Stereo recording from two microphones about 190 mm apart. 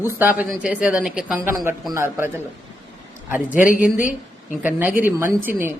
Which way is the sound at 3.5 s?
45° left (ahead or behind).